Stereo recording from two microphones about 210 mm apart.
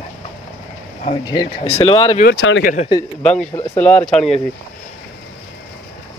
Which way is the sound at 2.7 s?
30° left (ahead or behind).